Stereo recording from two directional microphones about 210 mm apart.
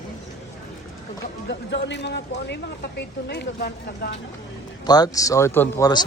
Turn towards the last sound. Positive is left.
turn(degrees=15)  # may be behind; listen again after turning